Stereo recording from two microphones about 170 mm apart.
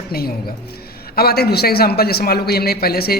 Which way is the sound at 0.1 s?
65° left (ahead or behind).